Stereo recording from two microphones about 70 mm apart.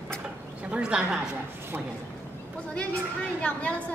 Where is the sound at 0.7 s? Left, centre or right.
Centre.